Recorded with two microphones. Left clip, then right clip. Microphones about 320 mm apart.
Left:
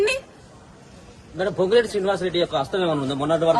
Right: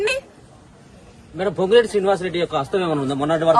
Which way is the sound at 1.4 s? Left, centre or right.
Right.